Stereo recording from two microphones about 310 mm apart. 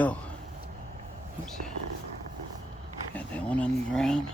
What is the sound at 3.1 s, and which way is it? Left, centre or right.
Speech, centre.